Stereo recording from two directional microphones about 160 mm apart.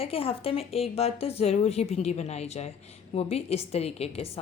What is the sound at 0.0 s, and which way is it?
A woman's voice, 35° left (ahead or behind).